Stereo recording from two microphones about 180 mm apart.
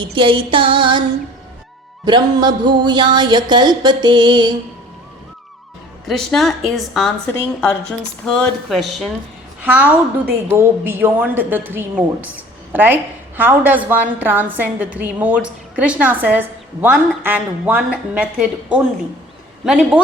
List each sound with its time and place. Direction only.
0.0 s speech: 30° right (ahead or behind)
2.0 s speech: 25° right (ahead or behind)
6.1 s a woman's voice: centre (ahead or behind)
8.3 s a woman's voice: centre (ahead or behind)
9.6 s a woman's voice: 10° right (ahead or behind)